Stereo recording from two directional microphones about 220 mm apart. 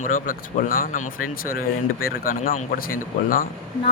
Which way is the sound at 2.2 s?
40° left (ahead or behind).